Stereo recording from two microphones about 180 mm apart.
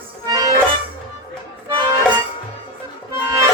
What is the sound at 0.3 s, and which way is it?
Accordion, 20° right (ahead or behind).